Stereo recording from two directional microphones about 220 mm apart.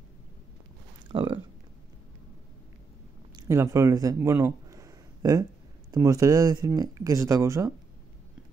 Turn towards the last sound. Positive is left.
turn(degrees=-15)  # may be behind; listen again after turning